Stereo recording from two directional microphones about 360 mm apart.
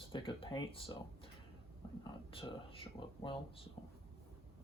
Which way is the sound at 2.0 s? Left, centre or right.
Centre.